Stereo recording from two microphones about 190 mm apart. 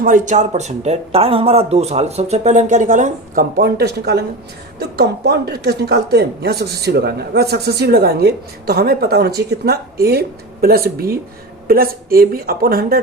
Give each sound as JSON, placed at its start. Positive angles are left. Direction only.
{"t": 0.0, "sound": "speech", "side_deg": -40}